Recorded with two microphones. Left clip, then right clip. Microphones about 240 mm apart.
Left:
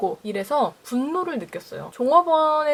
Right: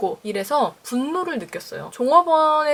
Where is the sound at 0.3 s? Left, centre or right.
Centre.